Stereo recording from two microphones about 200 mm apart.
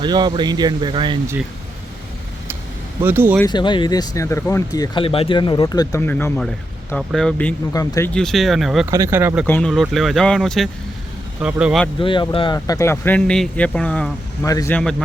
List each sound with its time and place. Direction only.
0.0 s speech: 20° right (ahead or behind)
3.0 s speech: 10° right (ahead or behind)
3.4 s speech: 20° left (ahead or behind); by 7.5 s 5° left (ahead or behind)
7.7 s speech: 15° left (ahead or behind)
8.1 s speech: centre (ahead or behind)
8.9 s speech: 15° right (ahead or behind)
9.5 s speech: 5° left (ahead or behind)
11.9 s speech: 25° left (ahead or behind); by 14.1 s 5° left (ahead or behind)
14.4 s speech: 15° left (ahead or behind)